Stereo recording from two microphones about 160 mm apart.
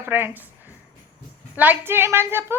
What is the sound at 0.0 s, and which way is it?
Speech, 15° right (ahead or behind).